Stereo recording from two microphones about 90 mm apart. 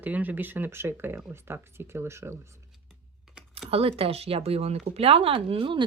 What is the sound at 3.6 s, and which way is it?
Speech, 90° right.